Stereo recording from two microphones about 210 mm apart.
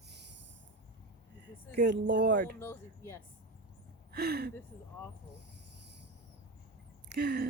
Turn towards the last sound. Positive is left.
turn(degrees=-50)  # may be behind; listen again after turning